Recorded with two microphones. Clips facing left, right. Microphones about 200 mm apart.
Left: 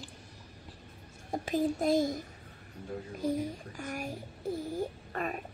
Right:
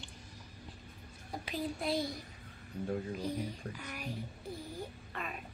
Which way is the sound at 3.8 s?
45° left (ahead or behind).